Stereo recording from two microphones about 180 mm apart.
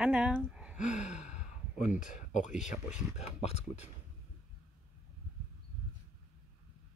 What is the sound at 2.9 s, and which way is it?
Speech, 5° right (ahead or behind).